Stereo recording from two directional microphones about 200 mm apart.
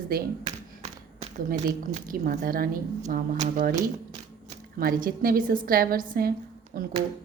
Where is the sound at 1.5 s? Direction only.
45° right (ahead or behind).